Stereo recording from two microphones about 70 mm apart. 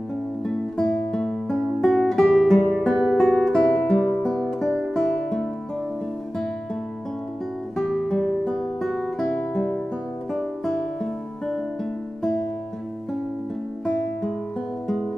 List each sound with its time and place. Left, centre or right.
0.5 s music: centre
7.7 s music: centre